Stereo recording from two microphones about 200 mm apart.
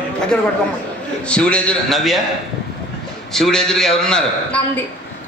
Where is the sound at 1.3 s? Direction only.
5° left (ahead or behind).